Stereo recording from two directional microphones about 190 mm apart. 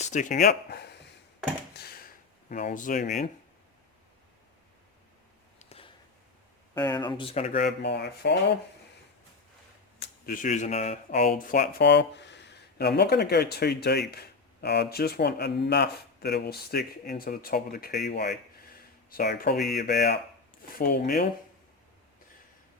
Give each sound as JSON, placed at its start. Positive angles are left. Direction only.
{"t": 0.0, "sound": "speech", "side_deg": 40}
{"t": 1.7, "sound": "a sound", "side_deg": 55}
{"t": 2.5, "sound": "speech", "side_deg": 45}
{"t": 5.5, "sound": "a sound", "side_deg": 30}
{"t": 6.7, "sound": "speech", "side_deg": 20}
{"t": 7.6, "sound": "speech", "side_deg": 65}
{"t": 10.0, "sound": "speech", "side_deg": 45}
{"t": 11.3, "sound": "speech", "side_deg": 50}